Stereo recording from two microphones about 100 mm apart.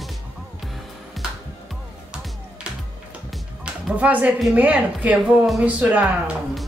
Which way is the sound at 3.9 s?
15° right (ahead or behind).